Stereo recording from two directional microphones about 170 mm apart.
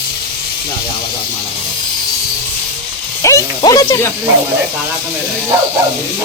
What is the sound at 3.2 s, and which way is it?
Speech, 20° left (ahead or behind).